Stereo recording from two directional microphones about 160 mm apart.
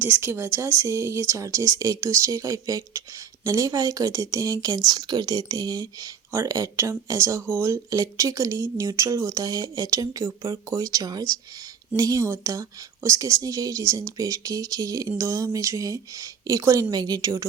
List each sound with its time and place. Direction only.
0.0 s a woman's voice: 15° right (ahead or behind)